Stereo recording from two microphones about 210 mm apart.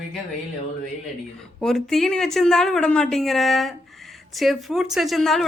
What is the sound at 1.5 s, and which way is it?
A woman's voice, centre (ahead or behind).